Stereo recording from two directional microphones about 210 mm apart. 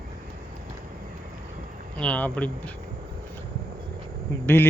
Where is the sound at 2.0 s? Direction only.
5° left (ahead or behind).